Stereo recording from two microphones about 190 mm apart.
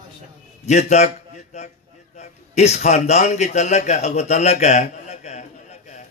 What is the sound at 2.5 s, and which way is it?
A man's voice, 35° left (ahead or behind).